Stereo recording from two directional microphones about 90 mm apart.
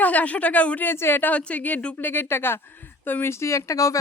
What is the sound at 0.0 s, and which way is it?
Speech, 15° left (ahead or behind).